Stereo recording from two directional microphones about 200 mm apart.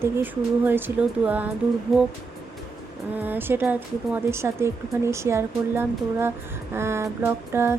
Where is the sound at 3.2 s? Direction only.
10° right (ahead or behind).